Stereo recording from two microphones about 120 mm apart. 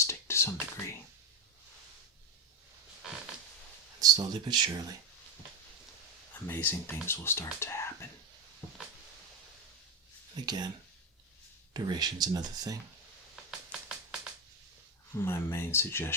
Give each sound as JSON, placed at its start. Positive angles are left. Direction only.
{"t": 0.0, "sound": "whispering", "side_deg": 20}
{"t": 4.0, "sound": "speech", "side_deg": -35}
{"t": 6.5, "sound": "speech", "side_deg": 15}
{"t": 10.3, "sound": "speech", "side_deg": -35}
{"t": 11.7, "sound": "speech", "side_deg": -35}
{"t": 13.3, "sound": "a sound", "side_deg": 0}
{"t": 15.1, "sound": "speech", "side_deg": 20}